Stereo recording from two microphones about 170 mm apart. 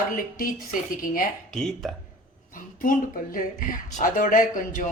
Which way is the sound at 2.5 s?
55° left (ahead or behind).